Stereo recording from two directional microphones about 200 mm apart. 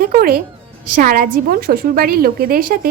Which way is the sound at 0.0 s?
45° right (ahead or behind).